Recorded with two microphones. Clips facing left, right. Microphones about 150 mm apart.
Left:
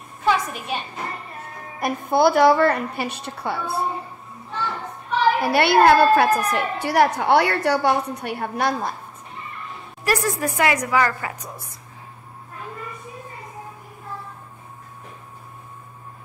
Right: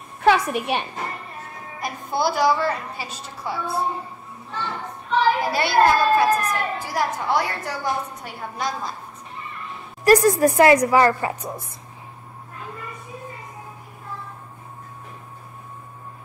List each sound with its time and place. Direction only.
0.2 s a sound: 70° right (ahead or behind)
1.8 s a woman's voice: 55° left (ahead or behind)
5.5 s a woman's voice: 65° left (ahead or behind)
10.0 s a woman's voice: 40° right (ahead or behind)